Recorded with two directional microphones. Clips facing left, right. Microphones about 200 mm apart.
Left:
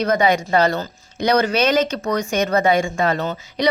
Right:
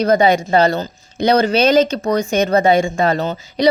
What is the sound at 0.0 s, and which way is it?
A woman's voice, 30° right (ahead or behind).